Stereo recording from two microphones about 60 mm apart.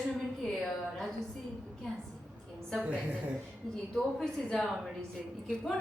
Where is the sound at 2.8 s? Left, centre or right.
Right.